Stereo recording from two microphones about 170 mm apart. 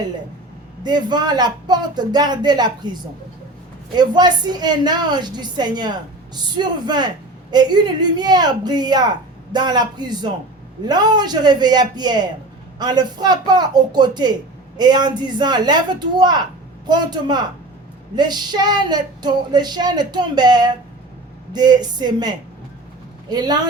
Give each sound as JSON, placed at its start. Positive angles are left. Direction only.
{"t": 0.8, "sound": "a woman's voice", "side_deg": -25}